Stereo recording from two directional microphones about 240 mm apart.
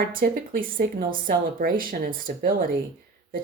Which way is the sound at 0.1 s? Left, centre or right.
Right.